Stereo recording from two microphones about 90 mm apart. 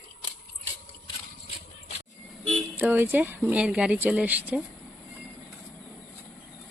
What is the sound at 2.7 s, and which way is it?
Speech, 20° right (ahead or behind).